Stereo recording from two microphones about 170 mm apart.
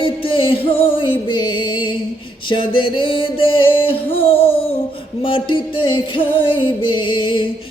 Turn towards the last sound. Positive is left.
turn(degrees=30)  # may be behind; listen again after turning